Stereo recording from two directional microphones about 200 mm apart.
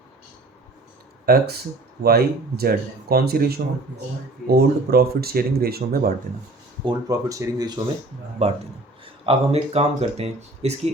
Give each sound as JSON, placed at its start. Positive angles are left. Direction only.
{"t": 1.2, "sound": "speech", "side_deg": -50}
{"t": 6.8, "sound": "speech", "side_deg": -15}
{"t": 8.4, "sound": "speech", "side_deg": -30}